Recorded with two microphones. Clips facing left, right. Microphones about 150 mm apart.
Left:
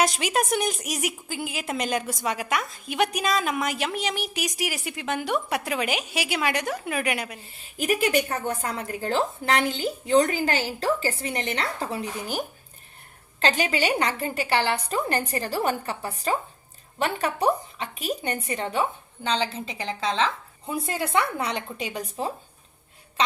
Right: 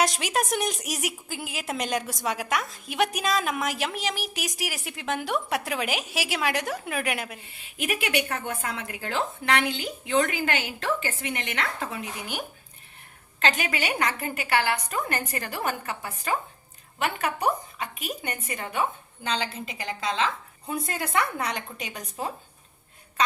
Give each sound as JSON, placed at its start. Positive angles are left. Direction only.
{"t": 0.0, "sound": "a woman's voice", "side_deg": 0}
{"t": 7.4, "sound": "a woman's voice", "side_deg": 40}